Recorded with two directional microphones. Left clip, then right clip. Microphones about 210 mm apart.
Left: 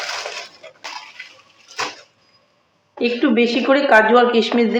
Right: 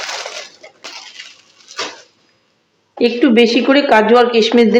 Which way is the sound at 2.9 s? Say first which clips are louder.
Right 6 dB; 40° right (ahead or behind).